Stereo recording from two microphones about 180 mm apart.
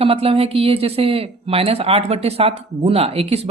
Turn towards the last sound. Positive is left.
turn(degrees=-35)  # may be behind; listen again after turning